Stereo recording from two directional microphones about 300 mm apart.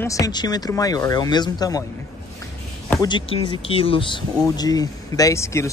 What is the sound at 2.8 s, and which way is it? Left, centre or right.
Speech, centre.